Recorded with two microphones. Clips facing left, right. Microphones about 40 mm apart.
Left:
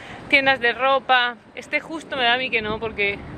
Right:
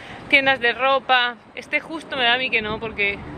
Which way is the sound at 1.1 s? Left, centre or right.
Centre.